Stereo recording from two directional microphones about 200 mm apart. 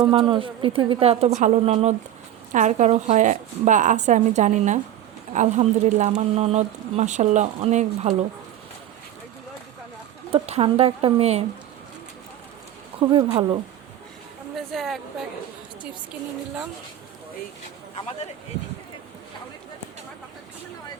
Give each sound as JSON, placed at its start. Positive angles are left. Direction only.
{"t": 0.0, "sound": "a woman's voice", "side_deg": -25}
{"t": 10.3, "sound": "a woman's voice", "side_deg": -30}
{"t": 13.0, "sound": "a woman's voice", "side_deg": -25}
{"t": 14.7, "sound": "a woman's voice", "side_deg": 0}